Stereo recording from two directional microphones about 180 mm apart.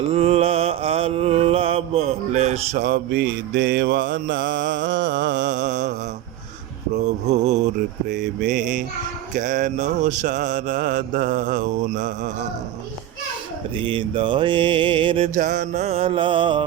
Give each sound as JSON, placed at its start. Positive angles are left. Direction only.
{"t": 0.1, "sound": "mantra", "side_deg": -35}
{"t": 2.8, "sound": "mantra", "side_deg": -70}
{"t": 5.6, "sound": "mantra", "side_deg": -45}
{"t": 6.9, "sound": "music", "side_deg": -40}
{"t": 8.0, "sound": "mantra", "side_deg": -50}
{"t": 13.7, "sound": "mantra", "side_deg": -30}
{"t": 15.4, "sound": "music", "side_deg": -45}